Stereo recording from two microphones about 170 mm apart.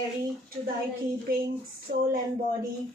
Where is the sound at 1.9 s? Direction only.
55° right (ahead or behind).